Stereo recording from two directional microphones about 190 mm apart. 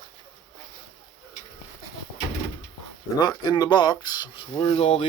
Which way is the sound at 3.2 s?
20° left (ahead or behind).